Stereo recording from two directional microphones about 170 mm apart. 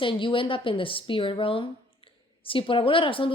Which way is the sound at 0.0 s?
30° left (ahead or behind).